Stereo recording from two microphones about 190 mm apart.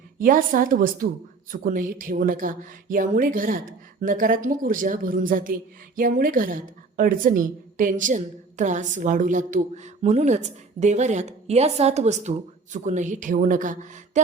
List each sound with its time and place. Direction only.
0.2 s a woman's voice: 45° right (ahead or behind)